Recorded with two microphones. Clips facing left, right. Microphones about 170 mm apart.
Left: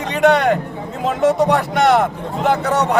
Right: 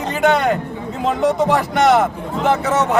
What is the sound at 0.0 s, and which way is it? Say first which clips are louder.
Speech: left 2 dB; centre (ahead or behind).